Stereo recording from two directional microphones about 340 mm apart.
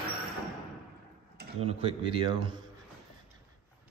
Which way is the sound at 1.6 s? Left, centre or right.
Centre.